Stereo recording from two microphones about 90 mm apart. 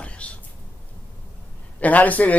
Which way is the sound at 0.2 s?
15° left (ahead or behind).